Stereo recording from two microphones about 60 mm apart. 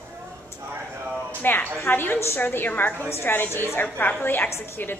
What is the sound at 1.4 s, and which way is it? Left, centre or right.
A woman's voice, left.